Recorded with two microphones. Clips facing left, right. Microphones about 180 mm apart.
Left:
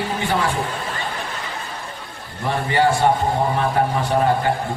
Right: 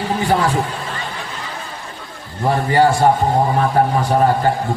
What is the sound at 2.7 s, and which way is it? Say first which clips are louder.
A man's voice: right 3 dB; 40° right (ahead or behind).